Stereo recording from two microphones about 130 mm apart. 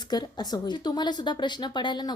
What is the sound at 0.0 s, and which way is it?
A woman's voice, 35° left (ahead or behind).